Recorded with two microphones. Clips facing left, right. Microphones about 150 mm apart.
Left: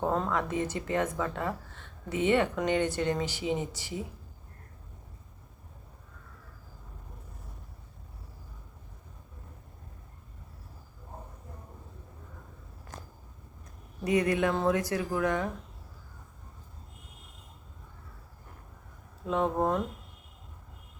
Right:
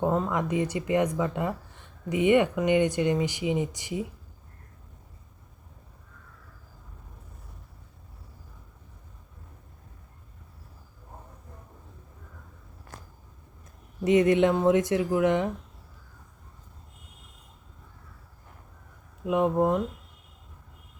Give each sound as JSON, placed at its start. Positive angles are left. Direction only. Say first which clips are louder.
{"t": 0.0, "sound": "speech", "louder": "right 3 dB", "side_deg": -10}
{"t": 14.0, "sound": "speech", "louder": "right 6 dB", "side_deg": -25}
{"t": 19.2, "sound": "speech", "louder": "right 4 dB", "side_deg": -15}